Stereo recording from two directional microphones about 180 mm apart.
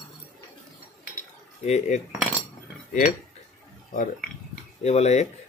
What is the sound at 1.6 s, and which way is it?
Speech, 40° left (ahead or behind).